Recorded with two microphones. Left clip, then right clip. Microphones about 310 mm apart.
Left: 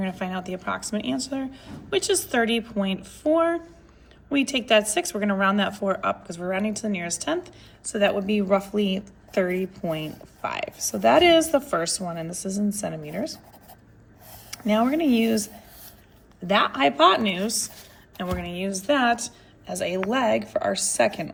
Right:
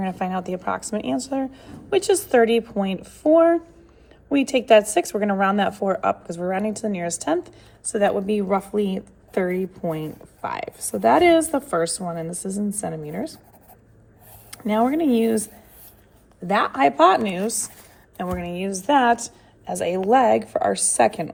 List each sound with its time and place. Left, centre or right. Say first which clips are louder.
0.0 s a woman's voice: right 4 dB; centre
14.5 s speech: right 2 dB; centre
16.5 s a woman's voice: right 2 dB; centre